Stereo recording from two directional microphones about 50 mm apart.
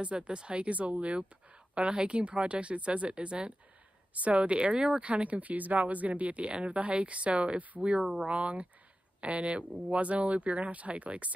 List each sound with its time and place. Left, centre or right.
0.0 s speech: right